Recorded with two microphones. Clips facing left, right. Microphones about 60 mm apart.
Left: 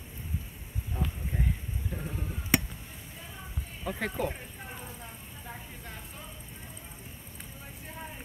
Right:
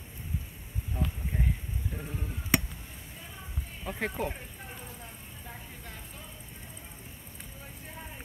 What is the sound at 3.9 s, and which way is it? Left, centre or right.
Speech, right.